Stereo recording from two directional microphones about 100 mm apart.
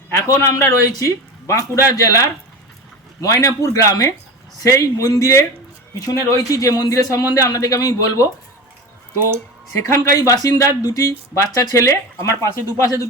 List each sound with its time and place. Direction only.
0.2 s a man's voice: 30° left (ahead or behind)
9.1 s speech: 25° right (ahead or behind)
9.8 s a man's voice: 30° left (ahead or behind)